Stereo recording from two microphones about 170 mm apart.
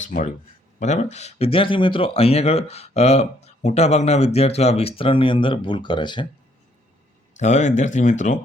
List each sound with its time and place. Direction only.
0.0 s speech: 50° left (ahead or behind); by 6.2 s 25° left (ahead or behind)
7.3 s speech: 45° left (ahead or behind)